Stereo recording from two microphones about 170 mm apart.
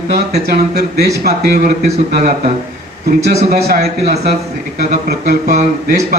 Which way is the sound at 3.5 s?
65° right (ahead or behind).